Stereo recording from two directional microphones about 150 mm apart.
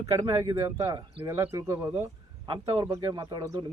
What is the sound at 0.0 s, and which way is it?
Speech, 25° right (ahead or behind).